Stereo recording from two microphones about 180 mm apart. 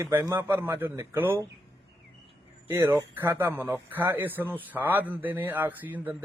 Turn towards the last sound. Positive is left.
turn(degrees=-10)  # may be behind; listen again after turning